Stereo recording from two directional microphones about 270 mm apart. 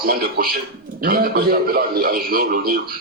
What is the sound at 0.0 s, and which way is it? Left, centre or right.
A man's voice, right.